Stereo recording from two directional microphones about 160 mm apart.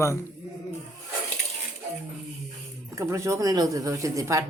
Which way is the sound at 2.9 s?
20° right (ahead or behind).